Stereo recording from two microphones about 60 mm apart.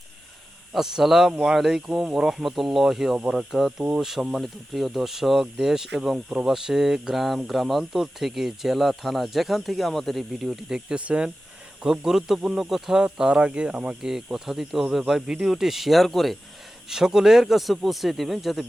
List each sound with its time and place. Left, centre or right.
0.7 s speech: centre
10.8 s speech: centre